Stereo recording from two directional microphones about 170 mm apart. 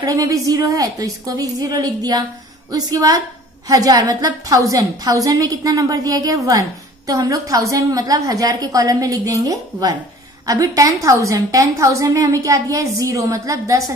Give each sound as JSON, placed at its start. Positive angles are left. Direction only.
{"t": 0.0, "sound": "a woman's voice", "side_deg": -20}